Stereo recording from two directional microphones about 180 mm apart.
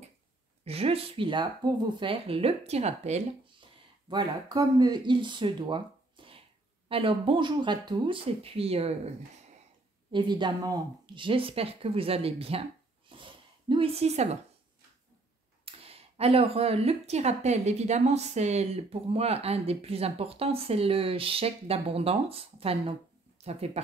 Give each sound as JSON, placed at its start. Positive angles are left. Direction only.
{"t": 0.7, "sound": "speech", "side_deg": -35}
{"t": 4.1, "sound": "speech", "side_deg": -25}
{"t": 10.1, "sound": "speech", "side_deg": -25}
{"t": 13.1, "sound": "zipper", "side_deg": -30}
{"t": 15.6, "sound": "speech", "side_deg": -35}